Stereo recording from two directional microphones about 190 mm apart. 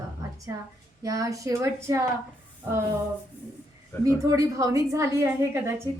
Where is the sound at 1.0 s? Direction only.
15° right (ahead or behind).